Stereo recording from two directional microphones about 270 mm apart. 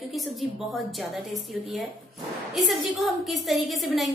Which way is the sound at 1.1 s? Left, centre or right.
Centre.